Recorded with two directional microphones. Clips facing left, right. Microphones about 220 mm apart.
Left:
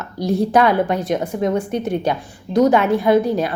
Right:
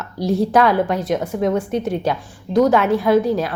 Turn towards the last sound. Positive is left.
turn(degrees=0)  # may be behind; listen again after turning